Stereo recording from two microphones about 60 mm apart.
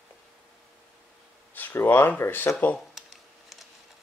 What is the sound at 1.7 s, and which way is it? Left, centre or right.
Speech, left.